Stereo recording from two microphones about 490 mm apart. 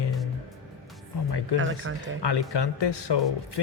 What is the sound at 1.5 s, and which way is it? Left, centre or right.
Speech, right.